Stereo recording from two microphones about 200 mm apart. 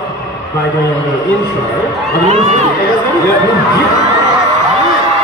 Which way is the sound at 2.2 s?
35° right (ahead or behind).